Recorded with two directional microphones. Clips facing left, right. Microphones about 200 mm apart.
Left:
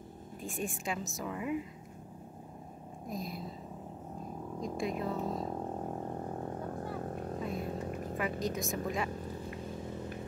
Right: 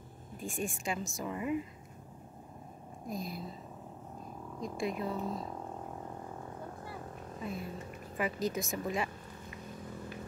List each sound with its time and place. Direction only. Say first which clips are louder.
0.4 s speech: right 1 dB; centre (ahead or behind)
3.1 s speech: even; centre (ahead or behind)
4.6 s speech: even; centre (ahead or behind)
5.3 s a sound: left 4 dB; 30° left (ahead or behind); by 8.1 s 45° left (ahead or behind)
8.2 s speech: right 2 dB; centre (ahead or behind)